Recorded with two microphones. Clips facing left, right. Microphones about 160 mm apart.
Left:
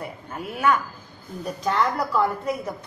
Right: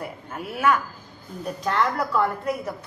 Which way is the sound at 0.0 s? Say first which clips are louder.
Even; centre (ahead or behind).